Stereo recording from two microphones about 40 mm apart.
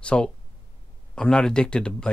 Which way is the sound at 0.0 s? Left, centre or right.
Left.